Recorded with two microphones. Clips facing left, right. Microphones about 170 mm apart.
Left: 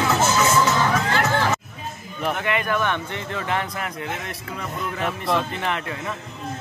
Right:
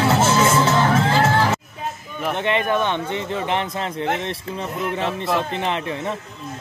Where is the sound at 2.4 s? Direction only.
25° right (ahead or behind).